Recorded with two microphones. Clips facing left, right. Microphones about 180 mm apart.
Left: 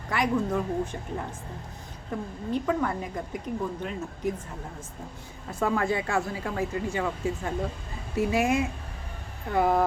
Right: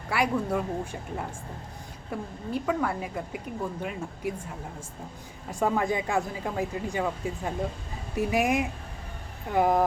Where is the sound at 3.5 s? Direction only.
35° left (ahead or behind).